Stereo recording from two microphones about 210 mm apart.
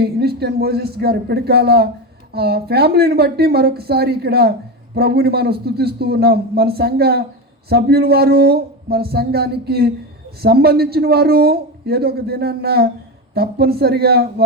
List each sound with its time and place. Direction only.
0.0 s a man's voice: 50° right (ahead or behind)